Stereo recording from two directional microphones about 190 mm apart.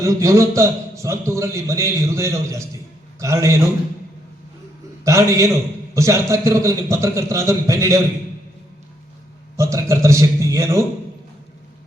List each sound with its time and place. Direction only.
0.0 s a man's voice: 15° right (ahead or behind)
5.0 s a man's voice: 15° right (ahead or behind)
9.6 s a man's voice: 15° right (ahead or behind)